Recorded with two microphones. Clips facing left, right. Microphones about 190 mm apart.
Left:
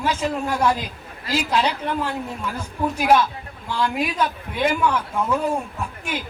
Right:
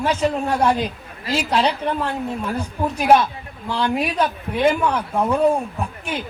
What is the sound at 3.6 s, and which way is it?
A man's voice, 30° right (ahead or behind).